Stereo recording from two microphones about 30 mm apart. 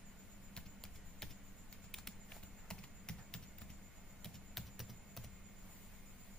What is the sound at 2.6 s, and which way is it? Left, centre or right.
Clip-clop, left.